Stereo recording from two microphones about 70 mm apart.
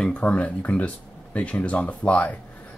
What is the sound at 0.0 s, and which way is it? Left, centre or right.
Speech, centre.